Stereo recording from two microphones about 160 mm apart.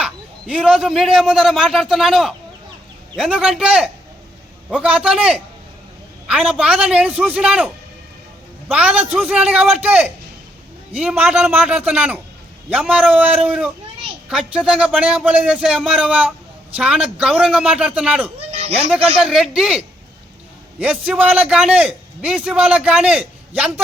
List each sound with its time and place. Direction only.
0.0 s a man's voice: 5° right (ahead or behind)
11.1 s a man's voice: 10° right (ahead or behind)
18.5 s a sound: 40° right (ahead or behind)
18.9 s a man's voice: 5° right (ahead or behind)